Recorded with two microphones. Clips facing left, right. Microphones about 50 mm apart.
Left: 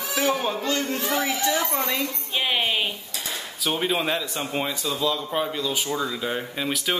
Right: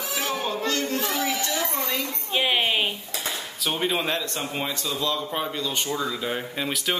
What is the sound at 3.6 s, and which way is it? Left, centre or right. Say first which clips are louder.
A man's voice: left 1 dB; centre.